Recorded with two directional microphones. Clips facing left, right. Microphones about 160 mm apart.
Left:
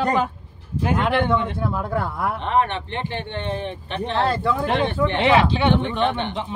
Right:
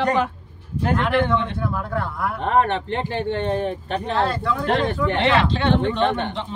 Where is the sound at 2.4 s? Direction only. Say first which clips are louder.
Right 3 dB; 45° right (ahead or behind).